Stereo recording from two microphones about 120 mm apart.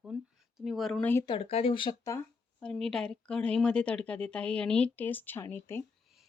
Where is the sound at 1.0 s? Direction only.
15° left (ahead or behind).